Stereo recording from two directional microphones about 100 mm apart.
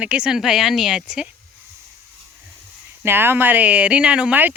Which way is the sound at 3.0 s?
20° right (ahead or behind).